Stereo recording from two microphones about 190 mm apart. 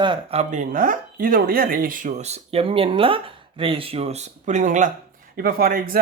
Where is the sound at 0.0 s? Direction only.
30° right (ahead or behind).